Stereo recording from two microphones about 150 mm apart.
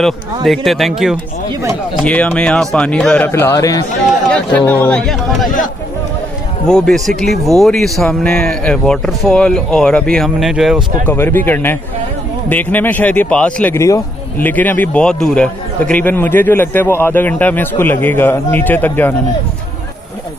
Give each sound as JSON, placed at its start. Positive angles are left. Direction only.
{"t": 0.0, "sound": "speech", "side_deg": 0}
{"t": 2.0, "sound": "a man's voice", "side_deg": 10}
{"t": 3.3, "sound": "a man's voice", "side_deg": 15}
{"t": 4.3, "sound": "speech", "side_deg": 10}
{"t": 6.7, "sound": "speech", "side_deg": 5}
{"t": 11.1, "sound": "a man's voice", "side_deg": 15}
{"t": 13.7, "sound": "a man's voice", "side_deg": 20}